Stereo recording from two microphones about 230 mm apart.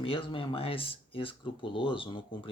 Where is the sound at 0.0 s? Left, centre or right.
Left.